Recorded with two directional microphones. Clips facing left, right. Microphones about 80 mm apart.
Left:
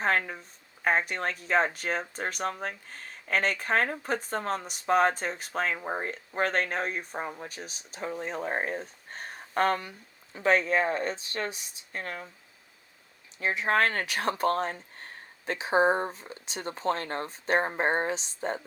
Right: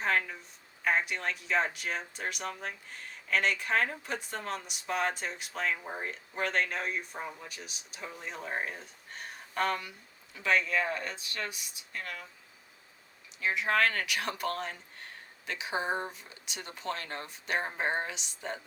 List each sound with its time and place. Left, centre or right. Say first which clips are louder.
0.0 s a sound: left 3 dB; left
0.9 s speech: left 3 dB; left
13.4 s speech: left 3 dB; left